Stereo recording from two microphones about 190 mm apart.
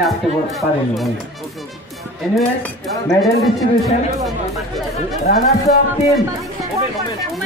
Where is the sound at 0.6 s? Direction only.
Centre (ahead or behind).